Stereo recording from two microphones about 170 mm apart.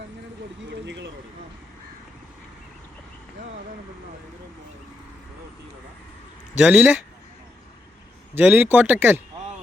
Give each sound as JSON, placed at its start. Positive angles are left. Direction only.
{"t": 0.7, "sound": "vehicle", "side_deg": -90}
{"t": 6.6, "sound": "speech", "side_deg": -10}
{"t": 8.4, "sound": "speech", "side_deg": -10}